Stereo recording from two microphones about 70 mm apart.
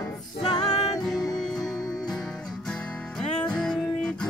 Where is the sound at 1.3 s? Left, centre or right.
Centre.